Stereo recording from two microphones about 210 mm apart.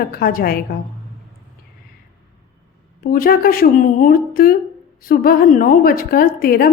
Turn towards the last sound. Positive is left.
turn(degrees=45)  # may be behind; listen again after turning